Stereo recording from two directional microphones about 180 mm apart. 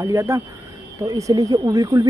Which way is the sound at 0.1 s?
15° right (ahead or behind).